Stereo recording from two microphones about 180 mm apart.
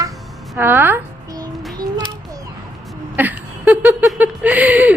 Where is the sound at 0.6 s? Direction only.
10° right (ahead or behind).